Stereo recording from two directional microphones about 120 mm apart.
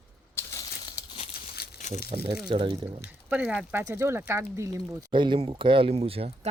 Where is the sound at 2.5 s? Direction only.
40° right (ahead or behind).